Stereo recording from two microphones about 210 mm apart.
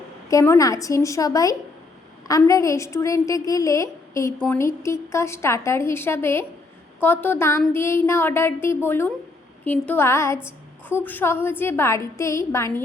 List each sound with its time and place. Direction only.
0.3 s a woman's voice: 15° left (ahead or behind)